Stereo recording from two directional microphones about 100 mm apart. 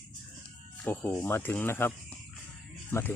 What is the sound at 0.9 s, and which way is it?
Speech, 20° left (ahead or behind).